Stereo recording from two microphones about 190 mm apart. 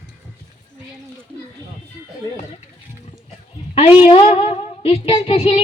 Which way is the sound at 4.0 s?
25° left (ahead or behind).